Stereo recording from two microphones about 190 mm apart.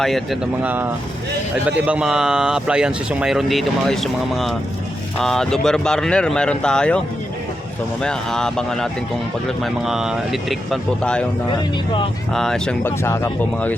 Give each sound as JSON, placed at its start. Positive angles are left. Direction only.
{"t": 0.0, "sound": "speech", "side_deg": 0}
{"t": 8.0, "sound": "speech", "side_deg": 5}
{"t": 12.3, "sound": "speech", "side_deg": 5}